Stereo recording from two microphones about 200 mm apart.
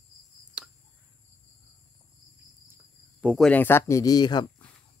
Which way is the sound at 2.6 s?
10° right (ahead or behind).